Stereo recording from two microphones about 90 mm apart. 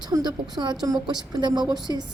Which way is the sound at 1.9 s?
40° right (ahead or behind).